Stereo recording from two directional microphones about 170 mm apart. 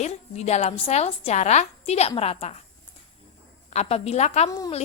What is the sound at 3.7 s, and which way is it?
Speech, 40° left (ahead or behind).